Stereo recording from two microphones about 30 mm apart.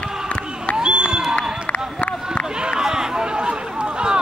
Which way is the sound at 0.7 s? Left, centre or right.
Right.